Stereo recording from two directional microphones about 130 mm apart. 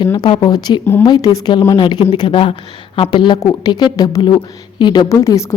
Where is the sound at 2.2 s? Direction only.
40° left (ahead or behind).